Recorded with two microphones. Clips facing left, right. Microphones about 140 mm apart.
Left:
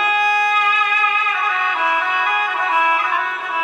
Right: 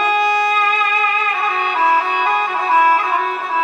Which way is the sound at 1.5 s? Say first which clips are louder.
Right 6 dB; 30° right (ahead or behind).